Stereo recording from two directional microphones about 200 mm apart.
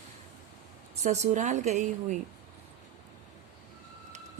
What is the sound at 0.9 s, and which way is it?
A woman's voice, 35° right (ahead or behind).